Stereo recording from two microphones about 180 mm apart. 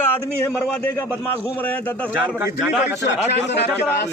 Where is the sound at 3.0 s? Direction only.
70° left (ahead or behind).